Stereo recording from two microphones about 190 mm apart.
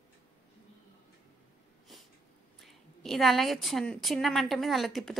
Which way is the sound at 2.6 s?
Centre (ahead or behind).